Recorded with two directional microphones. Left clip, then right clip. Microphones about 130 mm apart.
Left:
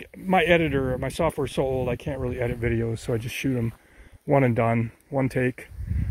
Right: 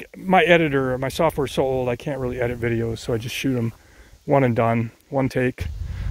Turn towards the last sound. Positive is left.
turn(degrees=-25)  # may be behind; listen again after turning